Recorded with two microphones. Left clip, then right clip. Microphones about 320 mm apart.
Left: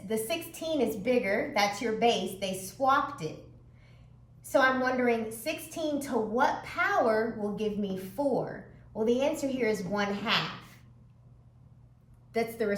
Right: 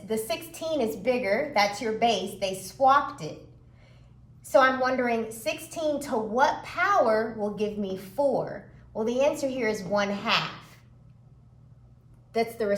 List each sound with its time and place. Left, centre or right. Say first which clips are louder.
0.1 s a woman's voice: right 2 dB; centre
2.8 s a woman's voice: right 5 dB; right
5.0 s a woman's voice: right 1 dB; centre
12.3 s a woman's voice: right 3 dB; centre